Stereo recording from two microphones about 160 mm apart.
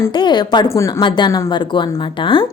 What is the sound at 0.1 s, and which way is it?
A woman's voice, 30° left (ahead or behind).